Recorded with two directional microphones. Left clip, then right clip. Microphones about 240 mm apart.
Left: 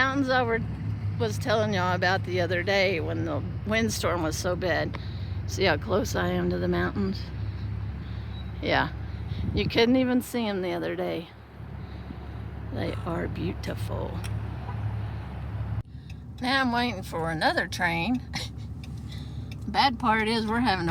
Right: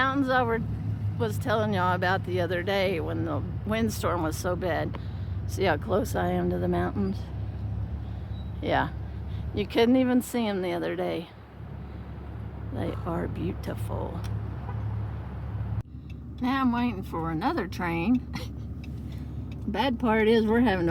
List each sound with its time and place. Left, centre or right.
0.0 s speech: centre
8.6 s speech: centre
12.7 s speech: centre
16.4 s speech: centre
19.7 s speech: centre